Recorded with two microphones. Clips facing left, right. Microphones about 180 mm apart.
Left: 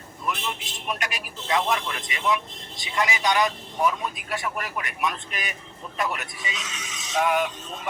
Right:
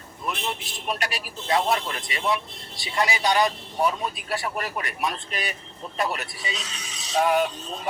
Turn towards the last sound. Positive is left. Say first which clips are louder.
# right 2 dB
turn(degrees=-35)  # may be behind; listen again after turning